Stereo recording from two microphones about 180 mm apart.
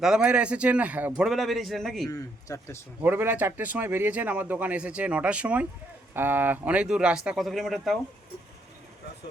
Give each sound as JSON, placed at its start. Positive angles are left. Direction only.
{"t": 0.0, "sound": "speech", "side_deg": -5}
{"t": 2.0, "sound": "speech", "side_deg": 20}
{"t": 3.0, "sound": "speech", "side_deg": -10}